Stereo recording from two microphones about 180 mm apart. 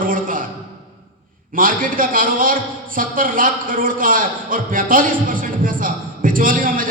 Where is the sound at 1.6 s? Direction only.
50° right (ahead or behind).